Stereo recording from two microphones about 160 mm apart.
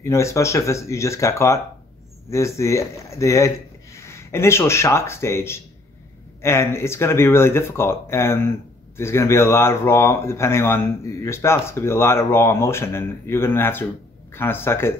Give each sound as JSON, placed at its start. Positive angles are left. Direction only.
{"t": 0.0, "sound": "speech", "side_deg": 20}